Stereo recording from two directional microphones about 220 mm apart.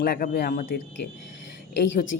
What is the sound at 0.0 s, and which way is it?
Speech, 45° left (ahead or behind).